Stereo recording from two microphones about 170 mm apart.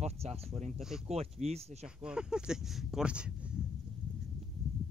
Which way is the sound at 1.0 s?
40° right (ahead or behind).